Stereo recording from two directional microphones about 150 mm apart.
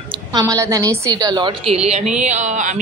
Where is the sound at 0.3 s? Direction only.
25° right (ahead or behind).